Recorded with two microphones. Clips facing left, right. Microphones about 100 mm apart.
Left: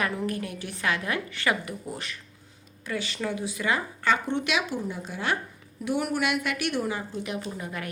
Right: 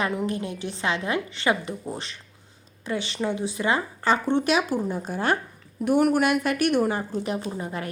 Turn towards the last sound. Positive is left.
turn(degrees=-30)  # may be behind; listen again after turning